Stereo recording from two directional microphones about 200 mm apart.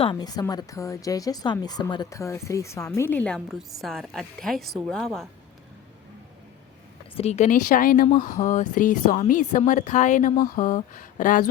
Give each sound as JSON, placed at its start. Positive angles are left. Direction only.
{"t": 0.0, "sound": "a woman's voice", "side_deg": 20}
{"t": 7.2, "sound": "a woman's voice", "side_deg": 35}